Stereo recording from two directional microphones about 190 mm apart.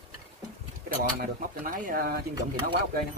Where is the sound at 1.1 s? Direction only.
45° right (ahead or behind).